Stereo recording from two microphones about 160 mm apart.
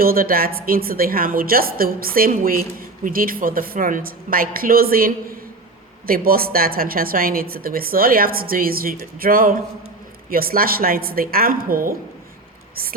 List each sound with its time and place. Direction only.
0.0 s a woman's voice: 65° right (ahead or behind)